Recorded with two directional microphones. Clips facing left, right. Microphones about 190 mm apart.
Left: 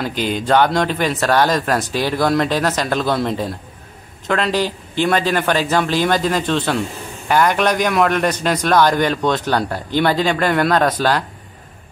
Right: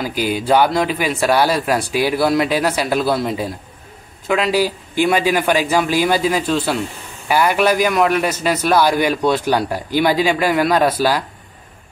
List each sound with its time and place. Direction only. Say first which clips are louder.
0.0 s a man's voice: right 1 dB; 10° right (ahead or behind)